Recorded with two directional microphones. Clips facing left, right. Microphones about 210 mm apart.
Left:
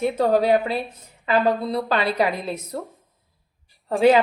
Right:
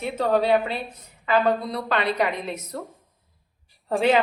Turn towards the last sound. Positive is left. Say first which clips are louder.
# left 2 dB
turn(degrees=0)  # may be behind; listen again after turning